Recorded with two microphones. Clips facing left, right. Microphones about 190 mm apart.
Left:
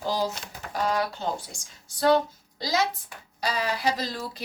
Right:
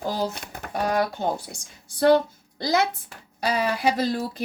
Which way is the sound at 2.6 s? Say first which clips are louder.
Right 4 dB; 55° right (ahead or behind).